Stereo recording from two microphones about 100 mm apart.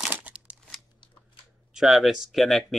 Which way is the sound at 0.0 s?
10° right (ahead or behind).